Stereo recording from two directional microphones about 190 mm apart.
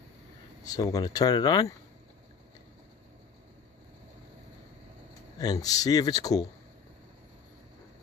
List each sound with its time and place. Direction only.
0.7 s speech: 20° left (ahead or behind)
5.4 s speech: 20° left (ahead or behind)